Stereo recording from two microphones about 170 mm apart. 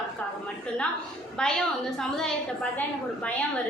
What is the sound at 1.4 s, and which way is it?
Speech, 5° left (ahead or behind).